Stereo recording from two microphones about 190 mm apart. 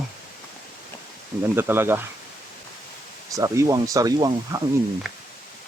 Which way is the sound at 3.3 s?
15° right (ahead or behind).